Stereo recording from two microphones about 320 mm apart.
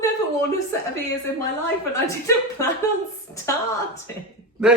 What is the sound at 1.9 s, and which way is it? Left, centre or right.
Speech, centre.